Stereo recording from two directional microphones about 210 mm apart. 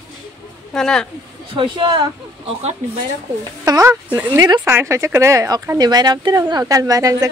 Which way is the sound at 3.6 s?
15° right (ahead or behind).